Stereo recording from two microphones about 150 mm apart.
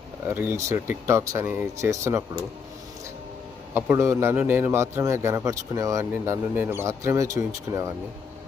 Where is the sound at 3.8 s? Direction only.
15° right (ahead or behind).